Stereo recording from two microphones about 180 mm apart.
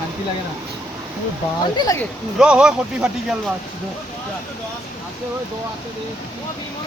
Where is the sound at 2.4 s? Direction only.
5° right (ahead or behind).